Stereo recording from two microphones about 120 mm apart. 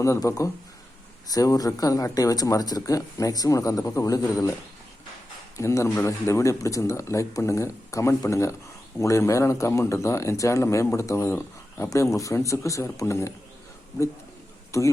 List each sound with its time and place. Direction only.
0.0 s speech: 25° left (ahead or behind)
5.5 s speech: 25° left (ahead or behind)
14.7 s speech: 25° left (ahead or behind)